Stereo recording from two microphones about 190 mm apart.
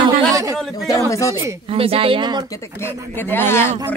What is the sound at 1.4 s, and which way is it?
Speech, 30° right (ahead or behind).